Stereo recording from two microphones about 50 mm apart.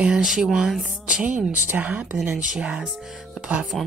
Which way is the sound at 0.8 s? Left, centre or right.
Right.